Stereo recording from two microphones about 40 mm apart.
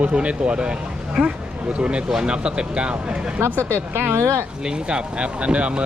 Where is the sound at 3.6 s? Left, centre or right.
Right.